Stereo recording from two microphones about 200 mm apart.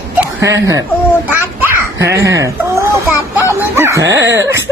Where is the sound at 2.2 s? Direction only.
15° right (ahead or behind).